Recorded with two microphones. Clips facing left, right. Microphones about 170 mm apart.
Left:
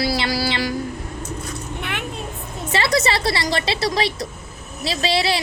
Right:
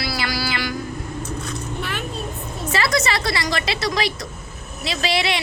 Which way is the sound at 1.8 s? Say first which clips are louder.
Even; 65° left (ahead or behind).